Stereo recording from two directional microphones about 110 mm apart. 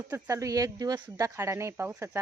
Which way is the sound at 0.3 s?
30° right (ahead or behind).